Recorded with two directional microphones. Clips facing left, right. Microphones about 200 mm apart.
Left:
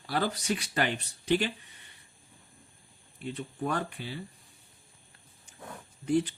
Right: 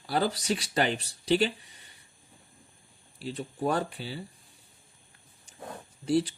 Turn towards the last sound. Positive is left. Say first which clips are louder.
# right 1 dB
turn(degrees=-35)  # may be behind; listen again after turning